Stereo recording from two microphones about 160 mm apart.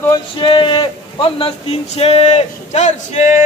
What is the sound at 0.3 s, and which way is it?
A man's voice, 30° left (ahead or behind).